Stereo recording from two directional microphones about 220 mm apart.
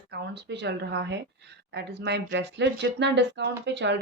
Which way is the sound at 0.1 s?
50° right (ahead or behind).